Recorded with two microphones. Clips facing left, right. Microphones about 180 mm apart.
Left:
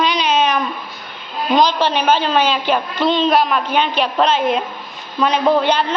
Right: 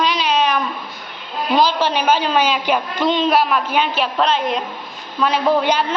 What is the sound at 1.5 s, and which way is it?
A woman's voice, 10° right (ahead or behind).